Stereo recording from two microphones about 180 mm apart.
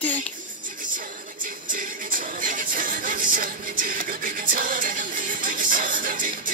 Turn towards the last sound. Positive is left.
turn(degrees=-50)  # may be behind; listen again after turning